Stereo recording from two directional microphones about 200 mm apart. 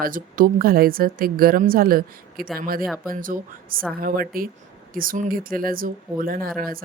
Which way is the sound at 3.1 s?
45° right (ahead or behind).